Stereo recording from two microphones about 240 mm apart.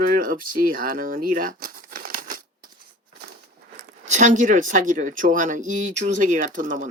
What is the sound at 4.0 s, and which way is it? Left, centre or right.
Speech, right.